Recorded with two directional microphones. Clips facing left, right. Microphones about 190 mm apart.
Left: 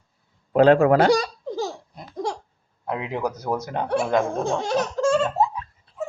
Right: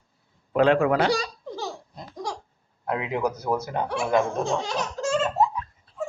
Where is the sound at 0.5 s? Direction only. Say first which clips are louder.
Left 5 dB; 40° left (ahead or behind).